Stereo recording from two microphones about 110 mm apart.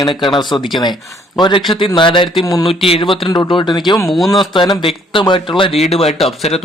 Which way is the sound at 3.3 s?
40° left (ahead or behind).